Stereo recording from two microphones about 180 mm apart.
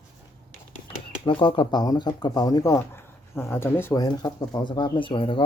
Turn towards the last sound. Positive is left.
turn(degrees=30)  # may be behind; listen again after turning